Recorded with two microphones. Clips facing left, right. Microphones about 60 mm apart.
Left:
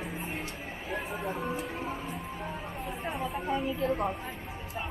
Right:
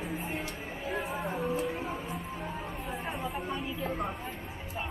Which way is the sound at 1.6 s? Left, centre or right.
Centre.